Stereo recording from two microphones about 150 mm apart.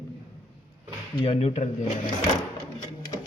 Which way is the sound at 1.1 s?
40° left (ahead or behind).